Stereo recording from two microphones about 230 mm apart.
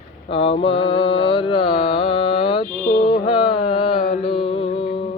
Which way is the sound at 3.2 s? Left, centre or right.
Left.